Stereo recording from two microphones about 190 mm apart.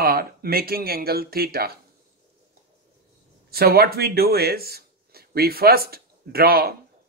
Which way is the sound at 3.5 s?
55° right (ahead or behind).